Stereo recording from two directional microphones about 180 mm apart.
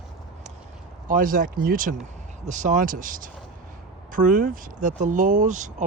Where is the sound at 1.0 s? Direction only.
50° right (ahead or behind).